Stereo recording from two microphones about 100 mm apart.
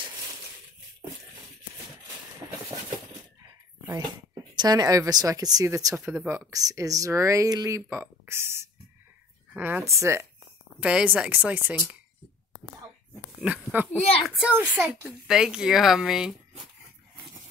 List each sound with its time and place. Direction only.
4.6 s speech: 40° right (ahead or behind)
10.8 s speech: 10° right (ahead or behind)
13.4 s speech: 10° right (ahead or behind)
14.2 s speech: centre (ahead or behind)
14.5 s speech: 20° right (ahead or behind)
15.2 s speech: 5° right (ahead or behind)